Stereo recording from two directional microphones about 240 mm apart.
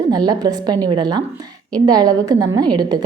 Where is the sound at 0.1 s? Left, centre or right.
Centre.